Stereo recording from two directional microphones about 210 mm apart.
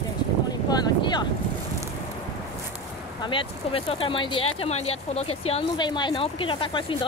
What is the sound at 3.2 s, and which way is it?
Speech, 25° left (ahead or behind).